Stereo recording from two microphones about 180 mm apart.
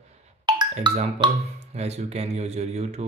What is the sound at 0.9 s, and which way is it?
Speech, 30° right (ahead or behind).